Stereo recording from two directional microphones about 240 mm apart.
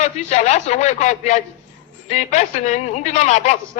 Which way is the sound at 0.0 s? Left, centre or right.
Left.